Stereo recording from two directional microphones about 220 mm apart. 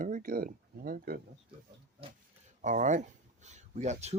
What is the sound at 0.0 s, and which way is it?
Speech, 40° right (ahead or behind).